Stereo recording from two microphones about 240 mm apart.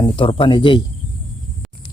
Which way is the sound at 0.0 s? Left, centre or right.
Left.